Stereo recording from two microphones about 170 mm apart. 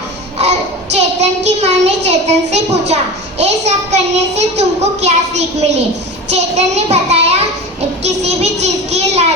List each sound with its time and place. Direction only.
0.3 s a woman's voice: 40° right (ahead or behind)